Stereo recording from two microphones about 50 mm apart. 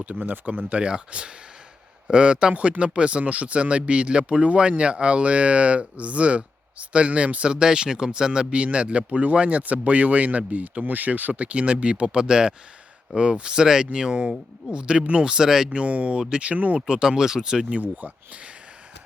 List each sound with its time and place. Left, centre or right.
0.2 s speech: right
16.8 s speech: centre
17.7 s speech: right